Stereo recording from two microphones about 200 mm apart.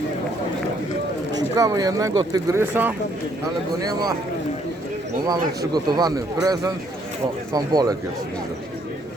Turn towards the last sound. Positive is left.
turn(degrees=-20)  # may be behind; listen again after turning